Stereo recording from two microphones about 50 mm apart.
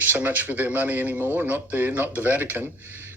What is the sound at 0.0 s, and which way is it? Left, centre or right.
Speech, right.